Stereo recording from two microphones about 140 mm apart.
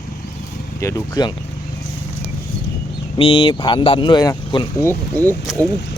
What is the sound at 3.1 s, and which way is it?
Speech, 40° left (ahead or behind).